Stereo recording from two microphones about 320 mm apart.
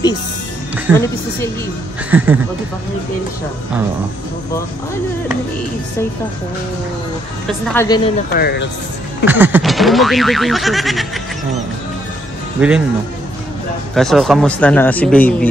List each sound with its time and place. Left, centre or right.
0.9 s speech: centre
2.0 s speech: centre
7.4 s a woman's voice: centre
8.3 s speech: left
9.2 s speech: centre
12.5 s speech: centre
13.9 s speech: centre